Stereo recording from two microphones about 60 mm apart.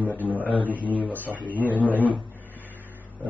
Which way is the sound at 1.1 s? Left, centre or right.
Left.